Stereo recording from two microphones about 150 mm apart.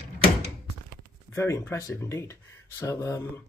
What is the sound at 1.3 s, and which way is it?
Speech, 20° left (ahead or behind).